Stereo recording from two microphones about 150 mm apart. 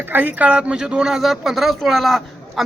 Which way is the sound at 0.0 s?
10° right (ahead or behind).